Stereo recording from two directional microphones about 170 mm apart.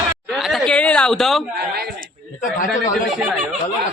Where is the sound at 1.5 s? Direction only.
70° right (ahead or behind).